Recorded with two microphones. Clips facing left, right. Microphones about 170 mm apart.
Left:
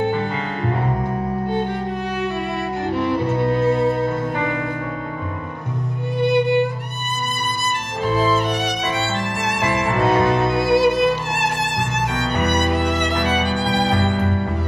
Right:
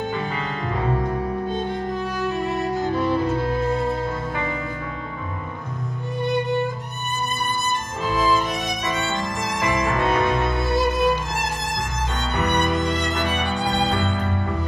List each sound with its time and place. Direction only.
2.8 s music: 65° left (ahead or behind)
6.2 s music: 70° left (ahead or behind)
8.1 s music: 30° left (ahead or behind)
9.7 s music: 30° left (ahead or behind)
10.5 s music: 65° left (ahead or behind)